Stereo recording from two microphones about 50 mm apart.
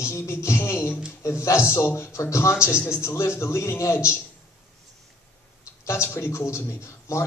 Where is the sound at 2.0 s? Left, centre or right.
Left.